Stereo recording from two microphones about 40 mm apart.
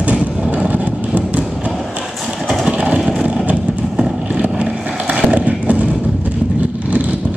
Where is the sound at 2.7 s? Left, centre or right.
Right.